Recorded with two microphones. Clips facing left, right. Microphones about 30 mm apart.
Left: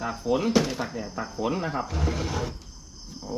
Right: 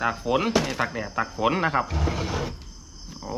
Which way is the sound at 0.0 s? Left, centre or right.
Right.